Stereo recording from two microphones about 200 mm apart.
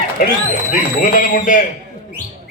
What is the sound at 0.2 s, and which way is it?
Speech, 45° left (ahead or behind).